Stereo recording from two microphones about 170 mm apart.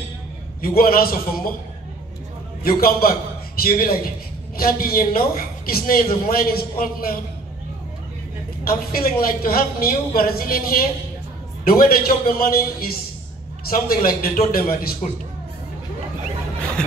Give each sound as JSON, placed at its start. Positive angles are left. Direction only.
{"t": 0.6, "sound": "speech", "side_deg": 60}
{"t": 2.6, "sound": "speech", "side_deg": 60}
{"t": 8.6, "sound": "speech", "side_deg": 60}